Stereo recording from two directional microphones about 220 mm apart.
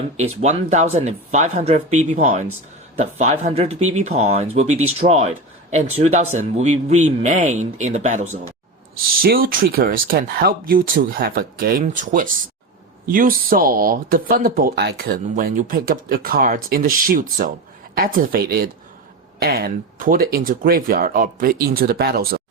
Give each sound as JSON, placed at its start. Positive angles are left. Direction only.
{"t": 0.4, "sound": "speech", "side_deg": -30}